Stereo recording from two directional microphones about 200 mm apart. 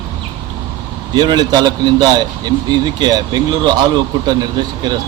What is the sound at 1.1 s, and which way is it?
A man's voice, 20° right (ahead or behind).